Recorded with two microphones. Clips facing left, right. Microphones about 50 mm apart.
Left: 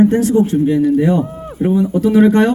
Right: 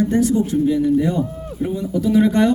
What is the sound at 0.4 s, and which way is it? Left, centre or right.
Speech, left.